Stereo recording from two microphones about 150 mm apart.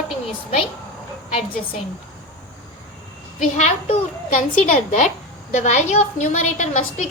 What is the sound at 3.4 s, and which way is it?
A woman's voice, 50° left (ahead or behind).